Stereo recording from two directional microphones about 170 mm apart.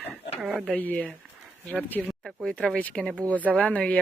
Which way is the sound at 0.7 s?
10° left (ahead or behind).